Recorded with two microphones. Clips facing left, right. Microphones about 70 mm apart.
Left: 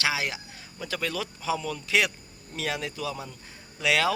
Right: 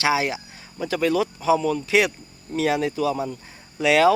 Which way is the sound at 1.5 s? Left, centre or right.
Right.